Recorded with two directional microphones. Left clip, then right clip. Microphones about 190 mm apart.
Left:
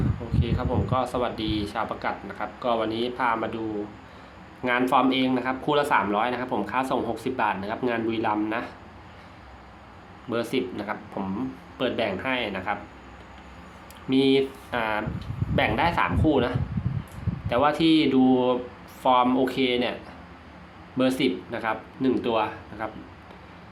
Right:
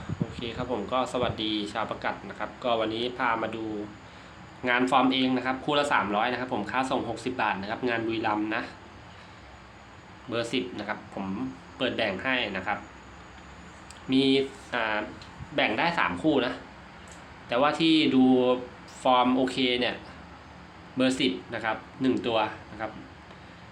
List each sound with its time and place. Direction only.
0.3 s speech: 5° left (ahead or behind)
4.6 s speech: 10° left (ahead or behind)
10.3 s speech: 15° left (ahead or behind)
14.1 s speech: 15° left (ahead or behind)
21.0 s speech: 15° left (ahead or behind)